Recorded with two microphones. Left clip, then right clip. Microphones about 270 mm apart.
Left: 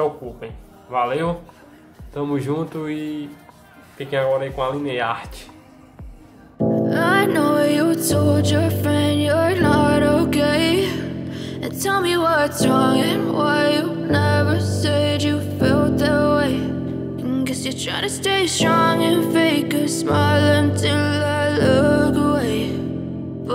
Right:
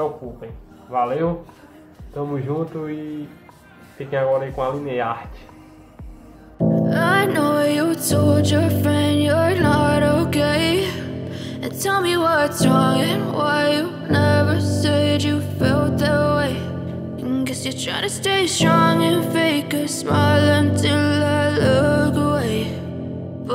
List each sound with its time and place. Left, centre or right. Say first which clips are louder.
0.9 s speech: even; centre
6.7 s music: even; centre